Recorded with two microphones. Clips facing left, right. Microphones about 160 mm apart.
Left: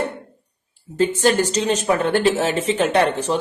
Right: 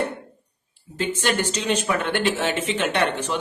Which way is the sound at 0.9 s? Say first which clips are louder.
Left 7 dB; 40° left (ahead or behind).